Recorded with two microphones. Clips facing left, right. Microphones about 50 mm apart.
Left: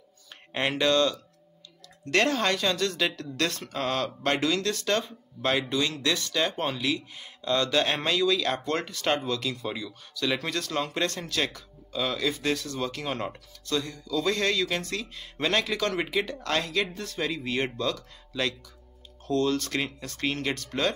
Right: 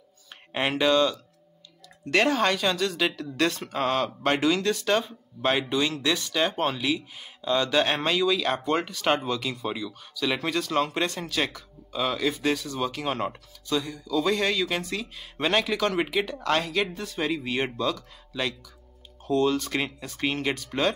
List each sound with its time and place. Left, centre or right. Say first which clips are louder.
0.5 s speech: right 2 dB; centre
16.4 s speech: right 3 dB; centre